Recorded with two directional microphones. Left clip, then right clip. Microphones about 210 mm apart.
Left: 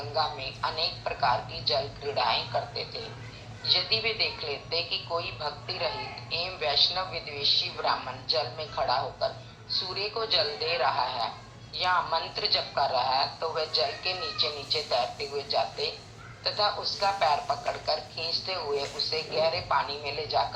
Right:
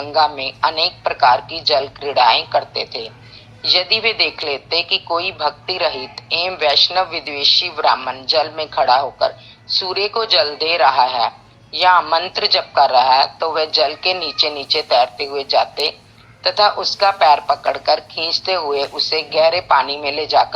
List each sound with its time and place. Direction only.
0.1 s a woman's voice: 50° right (ahead or behind)